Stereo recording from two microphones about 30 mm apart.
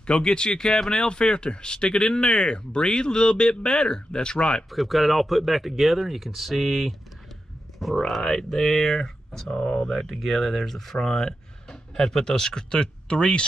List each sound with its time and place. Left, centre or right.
0.0 s speech: left
4.6 s speech: centre
8.2 s speech: centre
9.6 s speech: left
9.8 s speech: centre; by 13.5 s left